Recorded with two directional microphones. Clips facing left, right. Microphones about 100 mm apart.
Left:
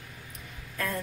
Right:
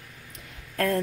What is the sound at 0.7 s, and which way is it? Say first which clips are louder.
Speech: right 8 dB; 75° right (ahead or behind).